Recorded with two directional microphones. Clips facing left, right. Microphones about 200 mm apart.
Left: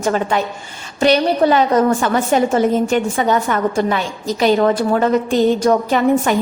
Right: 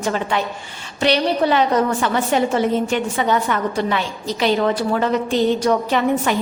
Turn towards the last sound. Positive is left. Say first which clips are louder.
# left 4 dB
turn(degrees=45)  # may be behind; listen again after turning